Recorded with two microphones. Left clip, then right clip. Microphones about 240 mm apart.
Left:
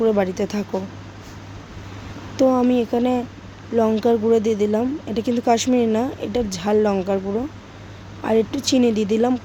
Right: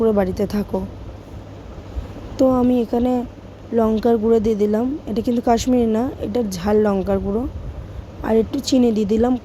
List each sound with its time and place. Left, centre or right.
0.0 s speech: centre
2.3 s speech: centre